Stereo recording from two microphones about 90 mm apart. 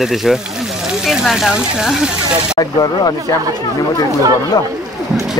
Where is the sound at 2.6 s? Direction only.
50° left (ahead or behind).